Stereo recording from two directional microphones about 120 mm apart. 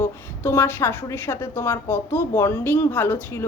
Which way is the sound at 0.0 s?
20° left (ahead or behind).